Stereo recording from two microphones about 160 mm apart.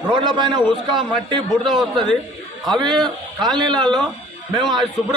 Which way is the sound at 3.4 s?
30° right (ahead or behind).